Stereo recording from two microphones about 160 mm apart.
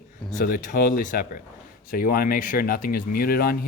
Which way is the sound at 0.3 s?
55° left (ahead or behind).